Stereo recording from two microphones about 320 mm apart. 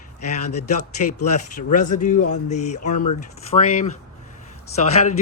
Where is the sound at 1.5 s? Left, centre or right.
Left.